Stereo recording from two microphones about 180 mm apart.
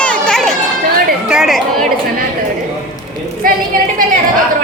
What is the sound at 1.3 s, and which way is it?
Chatter, centre (ahead or behind).